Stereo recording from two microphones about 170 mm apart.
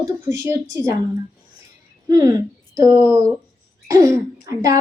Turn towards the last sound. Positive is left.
turn(degrees=-20)  # may be behind; listen again after turning